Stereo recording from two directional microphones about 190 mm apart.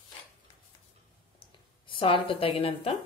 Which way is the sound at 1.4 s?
25° left (ahead or behind).